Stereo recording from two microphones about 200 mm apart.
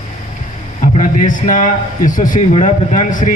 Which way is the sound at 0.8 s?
40° left (ahead or behind).